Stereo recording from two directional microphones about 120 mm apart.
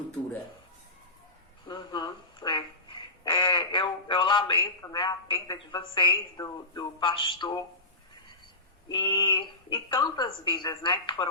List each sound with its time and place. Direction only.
1.6 s quack: 40° left (ahead or behind)
4.8 s a woman's voice: 35° left (ahead or behind)
8.9 s a woman's voice: 40° left (ahead or behind)